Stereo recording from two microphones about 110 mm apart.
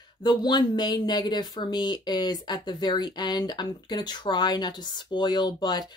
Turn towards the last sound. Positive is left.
turn(degrees=40)  # may be behind; listen again after turning